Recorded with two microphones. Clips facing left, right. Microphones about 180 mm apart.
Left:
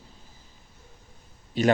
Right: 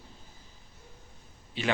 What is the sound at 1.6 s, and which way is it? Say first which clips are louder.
Speech: left 9 dB; 40° left (ahead or behind).